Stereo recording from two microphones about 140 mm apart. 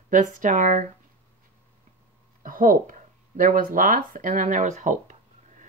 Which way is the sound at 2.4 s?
85° right.